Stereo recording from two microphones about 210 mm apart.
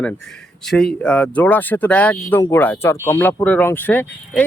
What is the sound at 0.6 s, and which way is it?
Speech, centre (ahead or behind).